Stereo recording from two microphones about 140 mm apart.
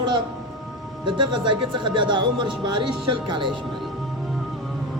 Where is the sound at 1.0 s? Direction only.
35° right (ahead or behind).